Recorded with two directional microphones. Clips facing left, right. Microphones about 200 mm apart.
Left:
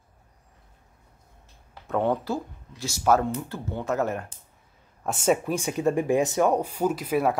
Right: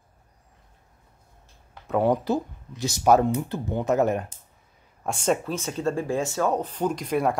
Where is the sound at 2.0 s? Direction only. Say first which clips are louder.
Right 3 dB; 15° right (ahead or behind).